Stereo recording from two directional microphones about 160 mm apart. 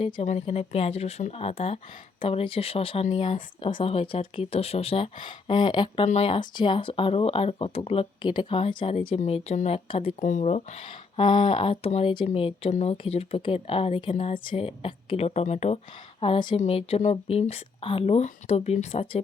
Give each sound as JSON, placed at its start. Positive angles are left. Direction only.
{"t": 0.0, "sound": "speech", "side_deg": 40}
{"t": 16.2, "sound": "speech", "side_deg": 35}